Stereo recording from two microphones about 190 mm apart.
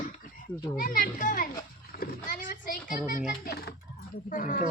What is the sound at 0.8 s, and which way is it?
A child's voice, 45° left (ahead or behind).